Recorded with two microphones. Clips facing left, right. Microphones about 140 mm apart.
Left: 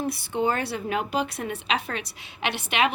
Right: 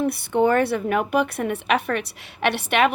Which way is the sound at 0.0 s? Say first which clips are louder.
Right 6 dB; 60° right (ahead or behind).